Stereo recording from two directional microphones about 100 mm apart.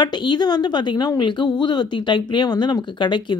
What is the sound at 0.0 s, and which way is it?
Speech, 50° left (ahead or behind).